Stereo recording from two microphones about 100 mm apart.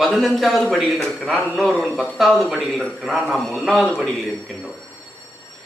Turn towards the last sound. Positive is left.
turn(degrees=0)  # may be behind; listen again after turning